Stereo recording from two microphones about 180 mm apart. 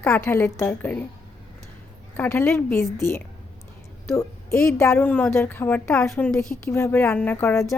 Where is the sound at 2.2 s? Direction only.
10° left (ahead or behind).